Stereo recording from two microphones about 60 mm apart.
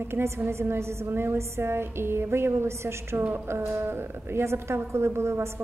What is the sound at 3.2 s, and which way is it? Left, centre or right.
Speech, right.